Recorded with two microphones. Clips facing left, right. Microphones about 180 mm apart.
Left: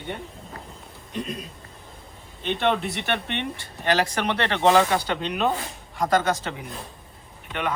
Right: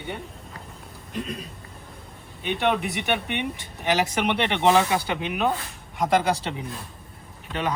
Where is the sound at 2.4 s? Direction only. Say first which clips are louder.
Even; 10° right (ahead or behind).